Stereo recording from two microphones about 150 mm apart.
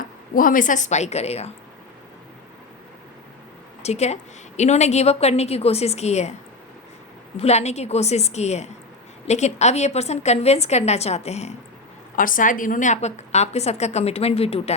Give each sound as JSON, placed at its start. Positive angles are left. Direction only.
{"t": 0.0, "sound": "speech", "side_deg": 65}
{"t": 3.8, "sound": "a woman's voice", "side_deg": 45}
{"t": 7.3, "sound": "a woman's voice", "side_deg": 45}
{"t": 12.1, "sound": "a woman's voice", "side_deg": 65}